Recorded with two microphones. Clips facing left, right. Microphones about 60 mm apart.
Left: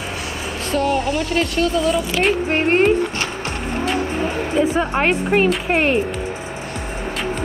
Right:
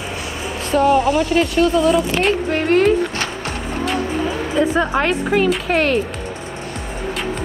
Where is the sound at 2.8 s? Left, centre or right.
Right.